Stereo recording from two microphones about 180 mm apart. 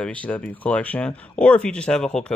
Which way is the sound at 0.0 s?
5° left (ahead or behind).